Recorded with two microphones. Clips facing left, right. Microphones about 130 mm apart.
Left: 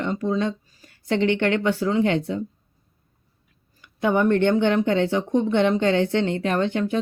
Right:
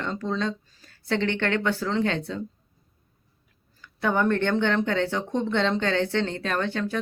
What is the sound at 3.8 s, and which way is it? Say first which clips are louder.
Speech: left 4 dB; 15° left (ahead or behind).